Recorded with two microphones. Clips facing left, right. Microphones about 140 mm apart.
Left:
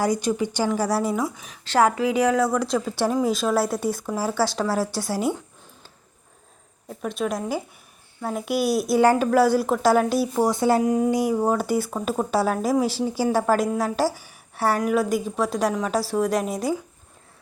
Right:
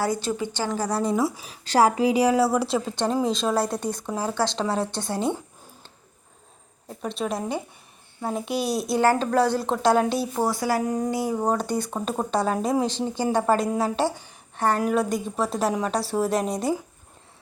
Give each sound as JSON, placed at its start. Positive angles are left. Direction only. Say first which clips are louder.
{"t": 0.0, "sound": "a woman's voice", "louder": "left 3 dB", "side_deg": 15}
{"t": 1.8, "sound": "a woman's voice", "louder": "even", "side_deg": -35}
{"t": 2.9, "sound": "a woman's voice", "louder": "left 2 dB", "side_deg": 5}
{"t": 7.2, "sound": "a woman's voice", "louder": "left 2 dB", "side_deg": 0}
{"t": 9.0, "sound": "a woman's voice", "louder": "left 3 dB", "side_deg": 10}
{"t": 10.4, "sound": "speech", "louder": "left 4 dB", "side_deg": 25}
{"t": 10.8, "sound": "a woman's voice", "louder": "left 4 dB", "side_deg": 10}